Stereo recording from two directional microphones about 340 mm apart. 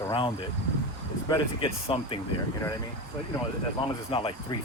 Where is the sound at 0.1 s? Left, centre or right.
Centre.